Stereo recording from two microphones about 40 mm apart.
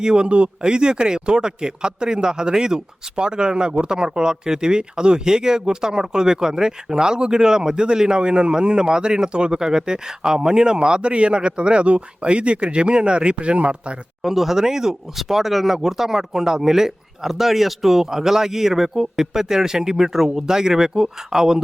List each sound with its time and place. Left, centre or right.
0.0 s speech: right
14.2 s speech: centre